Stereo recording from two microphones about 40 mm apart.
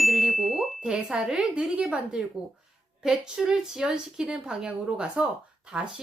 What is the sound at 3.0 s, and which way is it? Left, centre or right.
Speech, centre.